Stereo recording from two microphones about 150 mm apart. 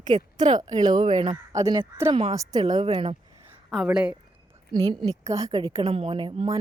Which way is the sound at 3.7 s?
5° right (ahead or behind).